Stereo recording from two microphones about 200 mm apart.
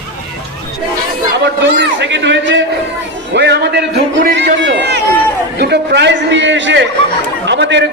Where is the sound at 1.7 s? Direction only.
60° right (ahead or behind).